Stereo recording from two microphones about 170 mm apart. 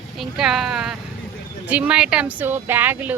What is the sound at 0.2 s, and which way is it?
Speech, 5° right (ahead or behind).